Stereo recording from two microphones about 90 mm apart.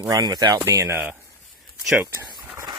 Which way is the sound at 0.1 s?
50° right (ahead or behind).